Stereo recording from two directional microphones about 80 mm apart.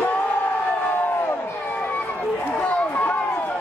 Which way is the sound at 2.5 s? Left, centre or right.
Centre.